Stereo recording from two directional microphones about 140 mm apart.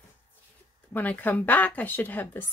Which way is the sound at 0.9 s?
10° left (ahead or behind).